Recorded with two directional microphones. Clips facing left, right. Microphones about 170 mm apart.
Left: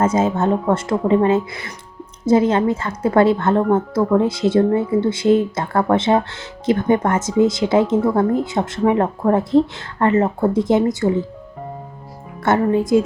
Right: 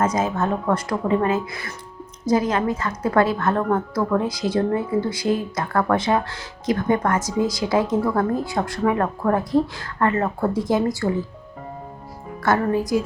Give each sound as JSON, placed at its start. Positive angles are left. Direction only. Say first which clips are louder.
{"t": 0.0, "sound": "speech", "louder": "left 4 dB", "side_deg": 25}
{"t": 12.4, "sound": "speech", "louder": "left 4 dB", "side_deg": 25}